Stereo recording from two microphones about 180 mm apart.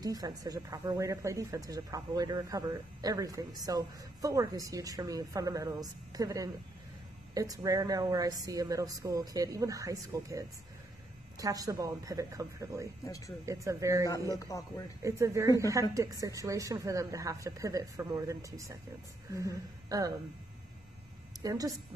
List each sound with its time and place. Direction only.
0.0 s speech: 20° right (ahead or behind)
14.0 s a man's voice: 20° left (ahead or behind)
15.0 s speech: 15° right (ahead or behind)
21.4 s a woman's voice: 20° right (ahead or behind)